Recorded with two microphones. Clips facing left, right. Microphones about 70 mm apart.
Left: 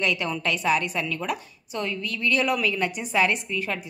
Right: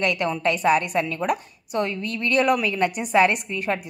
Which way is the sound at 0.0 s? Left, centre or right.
Right.